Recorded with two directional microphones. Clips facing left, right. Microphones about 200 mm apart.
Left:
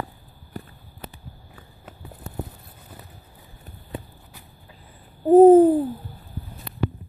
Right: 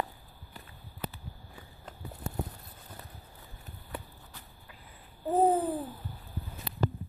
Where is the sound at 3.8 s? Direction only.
20° left (ahead or behind).